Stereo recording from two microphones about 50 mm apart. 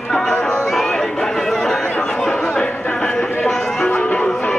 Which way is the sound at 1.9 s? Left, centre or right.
Left.